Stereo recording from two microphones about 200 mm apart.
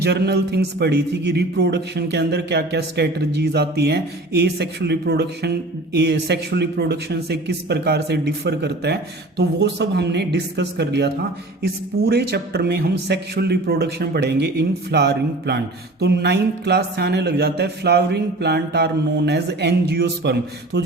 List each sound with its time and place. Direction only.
0.0 s a man's voice: 55° right (ahead or behind)